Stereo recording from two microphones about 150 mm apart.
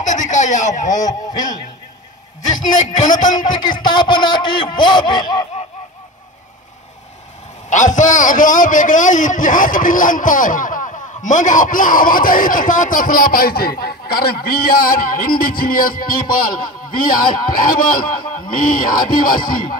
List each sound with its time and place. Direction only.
0.0 s baby laughter: 55° left (ahead or behind)
1.0 s a man's voice: 25° left (ahead or behind)
3.0 s a man's voice: 55° left (ahead or behind)
3.3 s a man's voice: 30° left (ahead or behind)
7.7 s a man's voice: 55° left (ahead or behind)